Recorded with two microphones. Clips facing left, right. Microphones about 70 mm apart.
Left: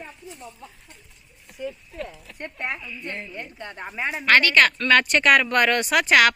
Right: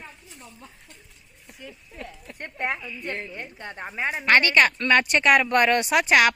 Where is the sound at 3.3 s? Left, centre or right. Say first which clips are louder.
Left 1 dB; right.